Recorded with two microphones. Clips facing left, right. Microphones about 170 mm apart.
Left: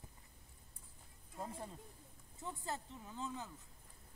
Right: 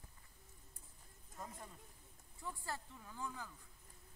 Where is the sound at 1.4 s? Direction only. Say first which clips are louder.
Left 5 dB; 30° left (ahead or behind).